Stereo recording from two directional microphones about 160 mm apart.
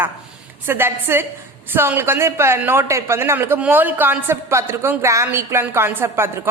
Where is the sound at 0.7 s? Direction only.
15° right (ahead or behind).